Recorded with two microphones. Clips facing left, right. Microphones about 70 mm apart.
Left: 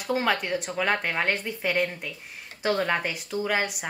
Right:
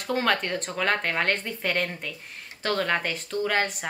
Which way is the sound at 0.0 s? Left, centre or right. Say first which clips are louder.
Even; centre.